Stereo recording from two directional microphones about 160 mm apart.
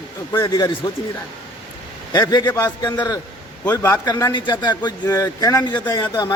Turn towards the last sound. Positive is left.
turn(degrees=25)  # may be behind; listen again after turning